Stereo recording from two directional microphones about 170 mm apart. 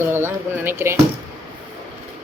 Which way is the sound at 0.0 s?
15° right (ahead or behind).